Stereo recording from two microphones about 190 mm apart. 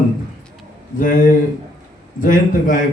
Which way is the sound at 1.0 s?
45° left (ahead or behind).